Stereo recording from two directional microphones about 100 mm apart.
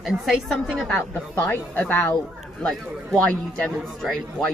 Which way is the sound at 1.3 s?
20° left (ahead or behind).